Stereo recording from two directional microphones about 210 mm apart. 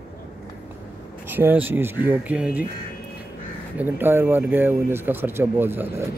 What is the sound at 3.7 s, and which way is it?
Speech, 10° right (ahead or behind).